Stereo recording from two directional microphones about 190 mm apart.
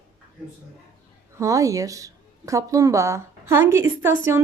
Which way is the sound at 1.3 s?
15° right (ahead or behind).